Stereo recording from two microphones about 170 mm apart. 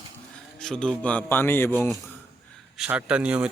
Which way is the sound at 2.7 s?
5° right (ahead or behind).